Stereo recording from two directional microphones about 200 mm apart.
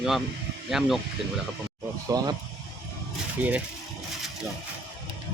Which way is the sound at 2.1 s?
20° right (ahead or behind).